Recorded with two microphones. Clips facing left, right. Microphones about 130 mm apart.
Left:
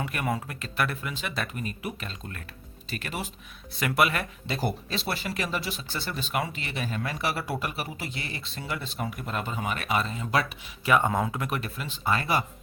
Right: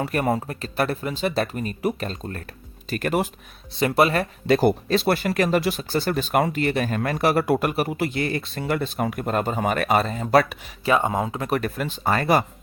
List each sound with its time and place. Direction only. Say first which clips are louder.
0.0 s speech: right 7 dB; 40° right (ahead or behind)
2.9 s speech: right 12 dB; 50° right (ahead or behind)
3.8 s speech: right 6 dB; 30° right (ahead or behind)
4.4 s speech: right 15 dB; 60° right (ahead or behind)
10.8 s speech: right 3 dB; 25° right (ahead or behind)
11.5 s speech: right 8 dB; 45° right (ahead or behind)